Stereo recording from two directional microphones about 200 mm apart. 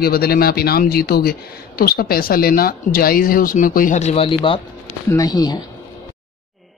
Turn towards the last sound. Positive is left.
turn(degrees=20)  # may be behind; listen again after turning